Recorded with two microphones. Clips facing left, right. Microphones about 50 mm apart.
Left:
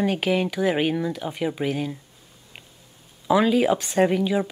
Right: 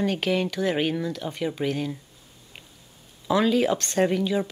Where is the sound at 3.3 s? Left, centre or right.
Centre.